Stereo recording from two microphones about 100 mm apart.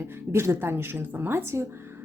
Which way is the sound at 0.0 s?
25° right (ahead or behind).